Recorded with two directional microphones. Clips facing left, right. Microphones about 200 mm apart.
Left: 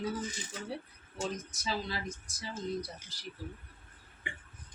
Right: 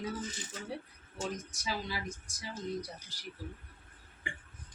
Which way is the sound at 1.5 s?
10° right (ahead or behind).